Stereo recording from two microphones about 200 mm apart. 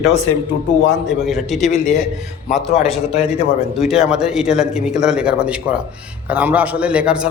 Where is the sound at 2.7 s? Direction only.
30° left (ahead or behind).